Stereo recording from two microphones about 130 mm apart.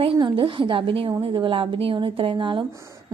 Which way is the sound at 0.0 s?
40° right (ahead or behind).